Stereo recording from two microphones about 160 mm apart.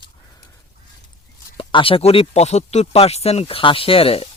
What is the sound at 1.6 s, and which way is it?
Speech, 30° left (ahead or behind).